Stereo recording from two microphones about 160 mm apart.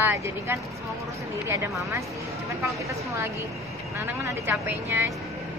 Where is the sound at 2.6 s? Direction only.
20° right (ahead or behind).